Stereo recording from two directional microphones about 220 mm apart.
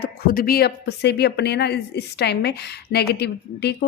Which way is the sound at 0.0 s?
40° left (ahead or behind).